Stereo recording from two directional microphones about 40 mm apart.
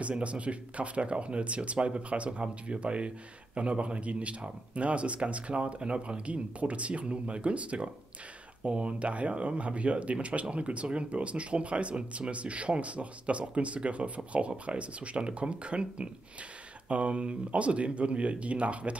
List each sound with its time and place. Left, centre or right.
0.1 s speech: right